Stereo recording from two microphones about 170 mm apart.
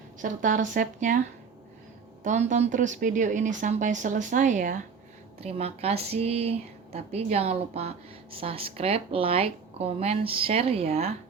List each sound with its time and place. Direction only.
0.2 s speech: 50° right (ahead or behind)
2.2 s speech: 45° right (ahead or behind)